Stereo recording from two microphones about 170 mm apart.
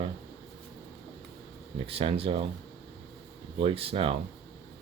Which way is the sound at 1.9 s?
35° right (ahead or behind).